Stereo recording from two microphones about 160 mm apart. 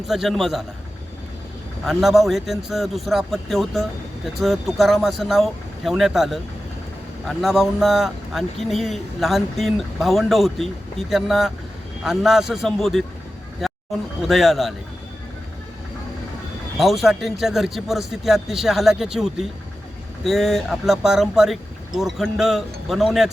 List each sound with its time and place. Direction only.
0.1 s speech: centre (ahead or behind)
1.8 s speech: centre (ahead or behind)
13.6 s a sound: centre (ahead or behind)
14.2 s speech: centre (ahead or behind)
16.7 s speech: centre (ahead or behind)